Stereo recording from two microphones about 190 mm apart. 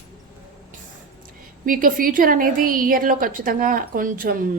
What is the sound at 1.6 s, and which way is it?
A woman's voice, 45° right (ahead or behind).